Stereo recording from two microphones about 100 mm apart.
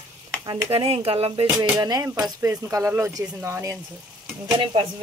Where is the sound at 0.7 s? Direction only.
70° right (ahead or behind).